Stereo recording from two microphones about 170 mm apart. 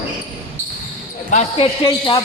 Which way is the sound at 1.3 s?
40° left (ahead or behind).